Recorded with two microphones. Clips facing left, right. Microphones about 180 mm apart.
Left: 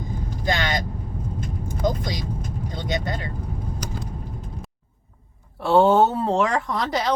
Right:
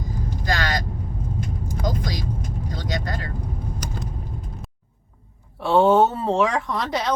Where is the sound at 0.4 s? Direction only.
20° left (ahead or behind).